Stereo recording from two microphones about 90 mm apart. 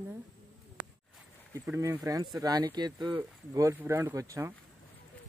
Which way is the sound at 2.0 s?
40° right (ahead or behind).